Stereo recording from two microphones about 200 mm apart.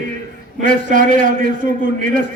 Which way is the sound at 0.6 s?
40° right (ahead or behind).